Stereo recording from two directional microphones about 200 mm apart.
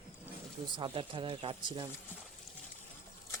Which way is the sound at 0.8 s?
25° right (ahead or behind).